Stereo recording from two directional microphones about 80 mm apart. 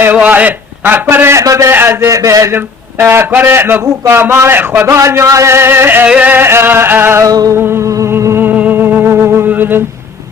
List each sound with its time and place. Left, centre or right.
0.0 s a sound: right
1.1 s music: right
1.4 s a man's voice: right
1.7 s music: right
2.1 s a man's voice: right
3.3 s music: right
4.9 s a man's voice: right
6.1 s music: centre
7.3 s music: right
7.5 s a man's voice: right
8.4 s music: right